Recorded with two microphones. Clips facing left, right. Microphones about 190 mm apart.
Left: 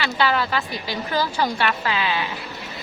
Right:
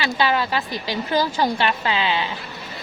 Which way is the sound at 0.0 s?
15° right (ahead or behind).